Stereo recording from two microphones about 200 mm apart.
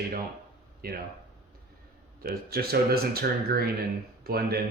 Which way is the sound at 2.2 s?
50° right (ahead or behind).